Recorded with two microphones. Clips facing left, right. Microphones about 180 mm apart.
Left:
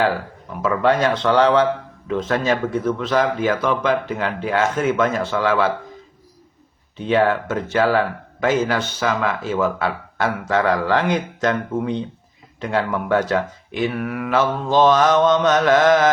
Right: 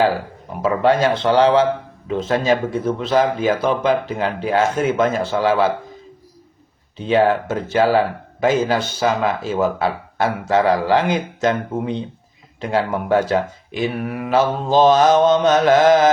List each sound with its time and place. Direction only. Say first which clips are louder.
0.6 s mantra: right 2 dB; 30° right (ahead or behind)
6.9 s mantra: right 2 dB; 25° right (ahead or behind)
9.0 s speech: right 3 dB; 30° right (ahead or behind)
10.5 s mantra: right 3 dB; 25° right (ahead or behind)